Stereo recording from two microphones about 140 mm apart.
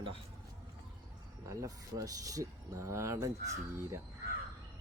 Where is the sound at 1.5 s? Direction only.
25° right (ahead or behind).